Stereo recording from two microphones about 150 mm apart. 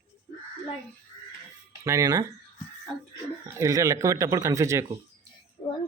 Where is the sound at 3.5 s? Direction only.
20° right (ahead or behind).